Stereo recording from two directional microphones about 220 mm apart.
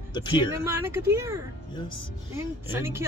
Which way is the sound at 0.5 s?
10° right (ahead or behind).